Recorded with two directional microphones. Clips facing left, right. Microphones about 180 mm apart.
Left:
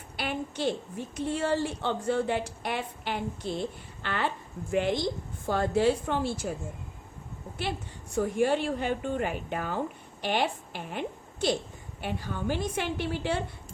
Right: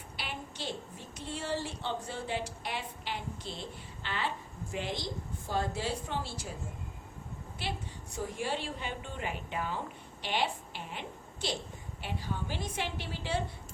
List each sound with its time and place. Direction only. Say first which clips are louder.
0.2 s a woman's voice: left 10 dB; 50° left (ahead or behind)
8.1 s a woman's voice: left 10 dB; 50° left (ahead or behind)